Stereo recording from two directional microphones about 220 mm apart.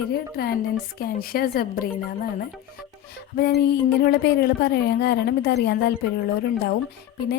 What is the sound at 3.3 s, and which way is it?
A woman's voice, 50° left (ahead or behind).